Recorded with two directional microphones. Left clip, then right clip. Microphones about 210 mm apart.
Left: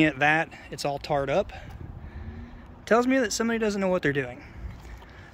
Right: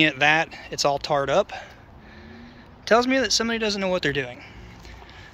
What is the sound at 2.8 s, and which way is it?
Speech, 15° left (ahead or behind).